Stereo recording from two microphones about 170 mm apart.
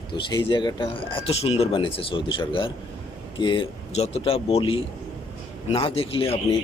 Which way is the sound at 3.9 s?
35° left (ahead or behind).